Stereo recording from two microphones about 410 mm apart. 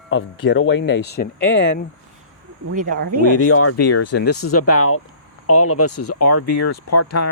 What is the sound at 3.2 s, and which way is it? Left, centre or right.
Speech, left.